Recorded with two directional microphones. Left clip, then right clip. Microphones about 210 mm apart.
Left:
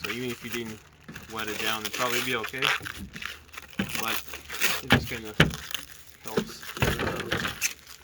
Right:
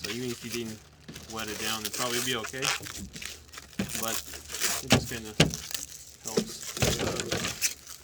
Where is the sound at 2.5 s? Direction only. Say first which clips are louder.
Left 4 dB; centre (ahead or behind).